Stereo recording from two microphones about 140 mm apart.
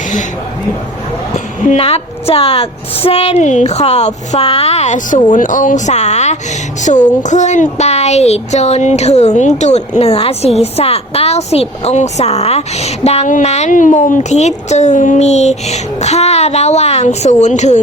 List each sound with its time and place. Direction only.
1.8 s speech: 45° left (ahead or behind)